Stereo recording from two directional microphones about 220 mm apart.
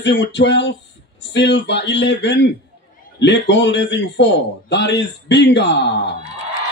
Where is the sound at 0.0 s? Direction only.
50° left (ahead or behind).